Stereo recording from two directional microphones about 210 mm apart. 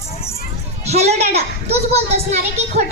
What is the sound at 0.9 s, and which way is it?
A child's voice, 30° right (ahead or behind).